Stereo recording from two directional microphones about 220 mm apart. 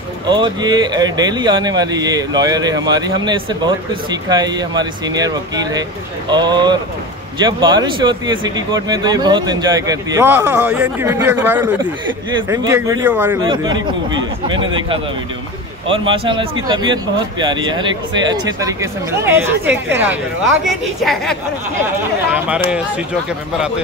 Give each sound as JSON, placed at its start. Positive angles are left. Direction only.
{"t": 0.3, "sound": "speech", "side_deg": -20}
{"t": 14.5, "sound": "speech", "side_deg": -20}
{"t": 16.1, "sound": "a woman's voice", "side_deg": -20}